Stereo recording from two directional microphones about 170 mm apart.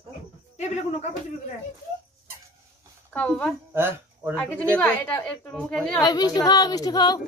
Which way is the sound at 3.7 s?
15° right (ahead or behind).